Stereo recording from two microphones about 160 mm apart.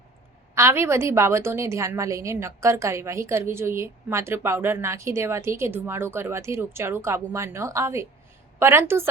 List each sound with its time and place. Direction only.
0.5 s a woman's voice: 15° right (ahead or behind)